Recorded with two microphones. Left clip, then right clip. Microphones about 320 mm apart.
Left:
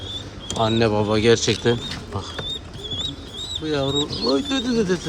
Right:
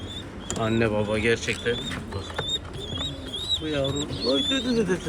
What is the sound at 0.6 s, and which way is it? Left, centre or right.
Speech, centre.